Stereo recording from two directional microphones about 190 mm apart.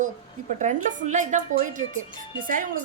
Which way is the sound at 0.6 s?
40° right (ahead or behind).